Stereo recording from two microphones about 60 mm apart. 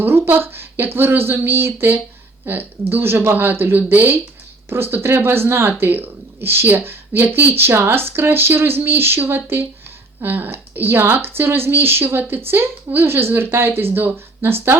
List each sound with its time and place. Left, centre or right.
0.0 s speech: right